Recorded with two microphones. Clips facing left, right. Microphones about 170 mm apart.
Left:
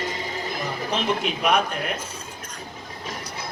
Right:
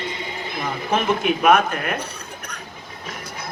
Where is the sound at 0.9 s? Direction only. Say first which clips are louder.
Right 5 dB; 50° right (ahead or behind).